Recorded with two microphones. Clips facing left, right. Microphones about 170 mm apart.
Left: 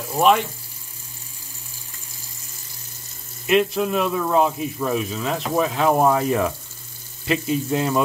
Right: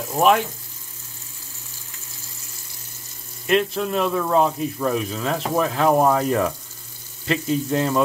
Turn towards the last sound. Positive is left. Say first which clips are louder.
# even
turn(degrees=5)  # may be behind; listen again after turning